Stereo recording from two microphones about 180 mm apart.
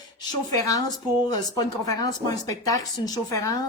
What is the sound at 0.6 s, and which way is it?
A woman's voice, 20° left (ahead or behind).